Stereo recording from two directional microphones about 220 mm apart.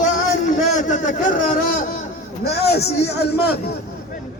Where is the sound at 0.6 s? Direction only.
35° left (ahead or behind).